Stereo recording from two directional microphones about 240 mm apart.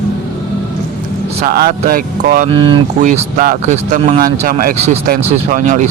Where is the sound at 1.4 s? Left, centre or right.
Right.